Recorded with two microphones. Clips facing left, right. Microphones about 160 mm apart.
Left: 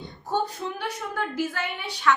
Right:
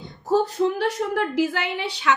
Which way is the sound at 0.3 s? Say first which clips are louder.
Right 8 dB; 90° right.